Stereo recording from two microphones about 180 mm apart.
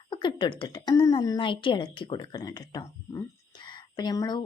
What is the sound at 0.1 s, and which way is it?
A woman's voice, 25° left (ahead or behind).